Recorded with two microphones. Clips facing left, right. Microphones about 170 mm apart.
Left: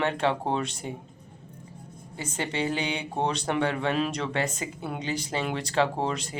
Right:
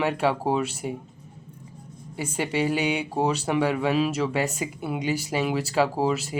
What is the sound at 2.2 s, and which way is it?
Speech, 10° right (ahead or behind).